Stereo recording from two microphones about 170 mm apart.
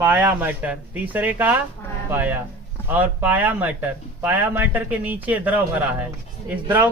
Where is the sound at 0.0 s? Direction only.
10° right (ahead or behind).